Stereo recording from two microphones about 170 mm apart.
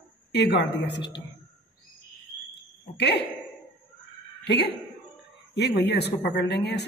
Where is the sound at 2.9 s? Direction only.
80° left.